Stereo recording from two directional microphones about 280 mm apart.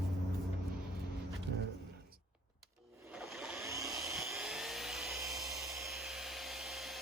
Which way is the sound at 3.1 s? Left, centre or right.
Centre.